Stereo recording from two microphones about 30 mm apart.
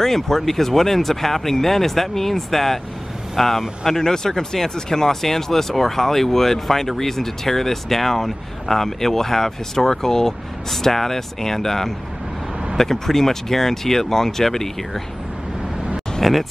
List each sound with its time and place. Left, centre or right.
0.0 s speech: centre
4.0 s speech: centre
16.2 s speech: centre